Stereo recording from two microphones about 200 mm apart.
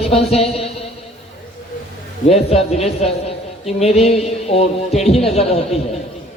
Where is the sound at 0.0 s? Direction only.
30° left (ahead or behind).